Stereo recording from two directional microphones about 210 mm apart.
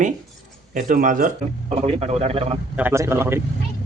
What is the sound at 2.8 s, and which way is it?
Speech, 10° right (ahead or behind).